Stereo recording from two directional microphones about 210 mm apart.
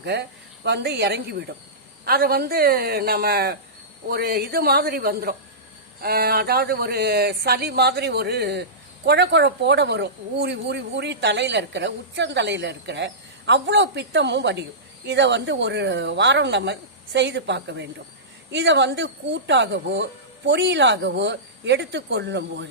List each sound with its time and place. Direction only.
0.0 s speech: 50° right (ahead or behind)